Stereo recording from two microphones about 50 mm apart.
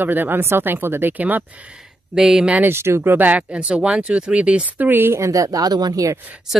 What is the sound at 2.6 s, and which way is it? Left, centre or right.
Speech, right.